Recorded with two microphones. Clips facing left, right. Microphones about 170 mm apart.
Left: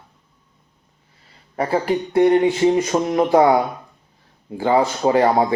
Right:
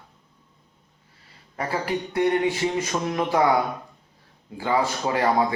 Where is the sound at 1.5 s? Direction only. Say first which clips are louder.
Left 7 dB; 30° left (ahead or behind).